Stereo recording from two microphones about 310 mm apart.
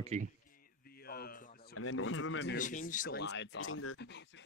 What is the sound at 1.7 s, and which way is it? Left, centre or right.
Speech, left.